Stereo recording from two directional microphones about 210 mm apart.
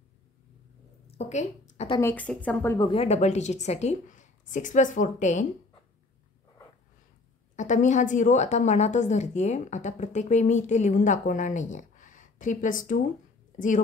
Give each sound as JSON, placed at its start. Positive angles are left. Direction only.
{"t": 1.0, "sound": "a sound", "side_deg": 30}
{"t": 2.0, "sound": "a woman's voice", "side_deg": 10}
{"t": 2.8, "sound": "a woman's voice", "side_deg": 25}
{"t": 7.5, "sound": "a woman's voice", "side_deg": 35}